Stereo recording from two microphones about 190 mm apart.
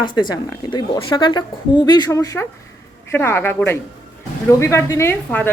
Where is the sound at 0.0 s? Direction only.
25° left (ahead or behind).